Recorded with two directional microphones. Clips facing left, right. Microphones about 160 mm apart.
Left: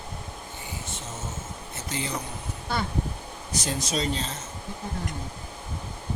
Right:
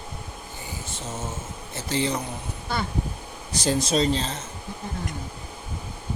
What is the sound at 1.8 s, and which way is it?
Speech, 30° right (ahead or behind).